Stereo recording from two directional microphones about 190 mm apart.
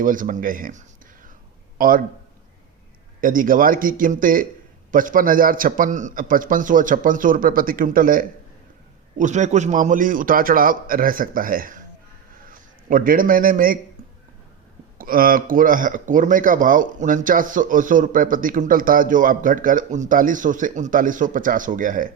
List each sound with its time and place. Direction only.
0.0 s speech: 45° right (ahead or behind)
3.2 s a man's voice: 45° right (ahead or behind)
14.9 s speech: 50° right (ahead or behind)